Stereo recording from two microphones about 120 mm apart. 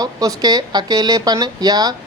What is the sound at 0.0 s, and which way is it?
Speech, 30° right (ahead or behind).